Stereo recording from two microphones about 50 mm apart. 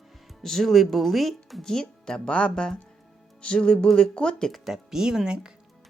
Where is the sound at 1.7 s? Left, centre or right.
Centre.